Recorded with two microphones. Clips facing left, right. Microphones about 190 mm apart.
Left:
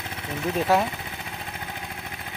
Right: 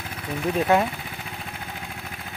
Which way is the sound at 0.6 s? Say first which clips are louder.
Right 1 dB; centre (ahead or behind).